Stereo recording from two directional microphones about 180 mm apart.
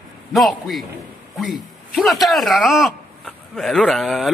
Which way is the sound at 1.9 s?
Centre (ahead or behind).